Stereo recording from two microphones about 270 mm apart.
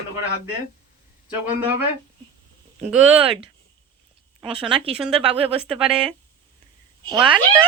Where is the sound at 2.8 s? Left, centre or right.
Centre.